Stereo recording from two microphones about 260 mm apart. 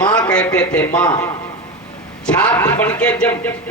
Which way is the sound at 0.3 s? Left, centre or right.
Centre.